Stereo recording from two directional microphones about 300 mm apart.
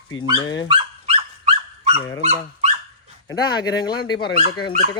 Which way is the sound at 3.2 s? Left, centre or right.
Centre.